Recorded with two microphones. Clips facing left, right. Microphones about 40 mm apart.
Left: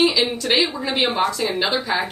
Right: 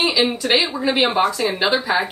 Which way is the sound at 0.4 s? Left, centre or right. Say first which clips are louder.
Right 1 dB; centre.